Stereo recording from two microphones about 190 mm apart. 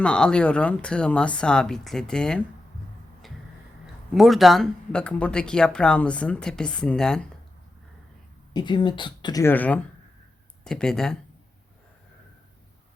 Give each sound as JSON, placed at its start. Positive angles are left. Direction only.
{"t": 0.0, "sound": "speech", "side_deg": 5}
{"t": 3.2, "sound": "tick-tock", "side_deg": 0}
{"t": 4.1, "sound": "speech", "side_deg": 0}
{"t": 8.5, "sound": "speech", "side_deg": 25}